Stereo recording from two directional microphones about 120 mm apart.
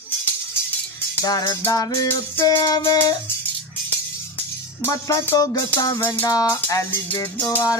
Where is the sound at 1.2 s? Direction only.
30° left (ahead or behind).